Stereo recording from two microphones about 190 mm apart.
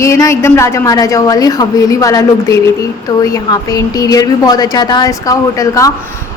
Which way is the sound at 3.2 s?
20° left (ahead or behind).